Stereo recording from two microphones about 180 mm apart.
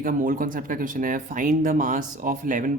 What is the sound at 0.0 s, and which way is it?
Speech, 50° right (ahead or behind).